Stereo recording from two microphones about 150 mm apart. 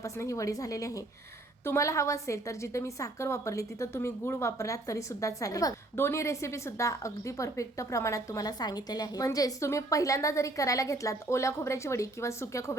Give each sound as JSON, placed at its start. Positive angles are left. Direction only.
{"t": 0.0, "sound": "a woman's voice", "side_deg": 20}